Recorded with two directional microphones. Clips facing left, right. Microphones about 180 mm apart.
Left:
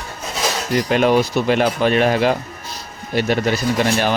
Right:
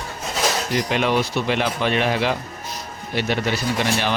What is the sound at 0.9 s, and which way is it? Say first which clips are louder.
Speech: left 7 dB; 45° left (ahead or behind).